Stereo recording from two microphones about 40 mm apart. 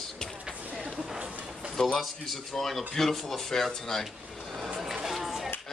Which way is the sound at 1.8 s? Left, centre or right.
Centre.